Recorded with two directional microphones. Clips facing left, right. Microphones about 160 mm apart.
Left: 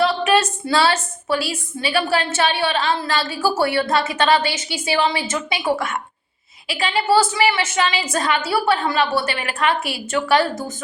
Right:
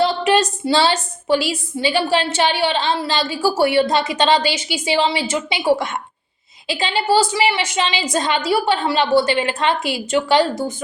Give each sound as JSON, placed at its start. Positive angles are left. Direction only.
{"t": 0.0, "sound": "a woman's voice", "side_deg": -25}